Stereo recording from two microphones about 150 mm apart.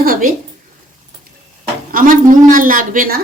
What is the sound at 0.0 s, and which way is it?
Speech, 70° right (ahead or behind).